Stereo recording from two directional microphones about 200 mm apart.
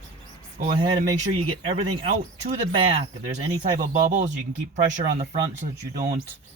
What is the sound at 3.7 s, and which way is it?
A man's voice, 35° right (ahead or behind).